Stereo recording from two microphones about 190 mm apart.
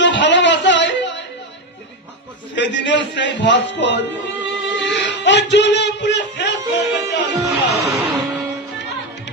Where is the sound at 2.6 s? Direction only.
70° left (ahead or behind).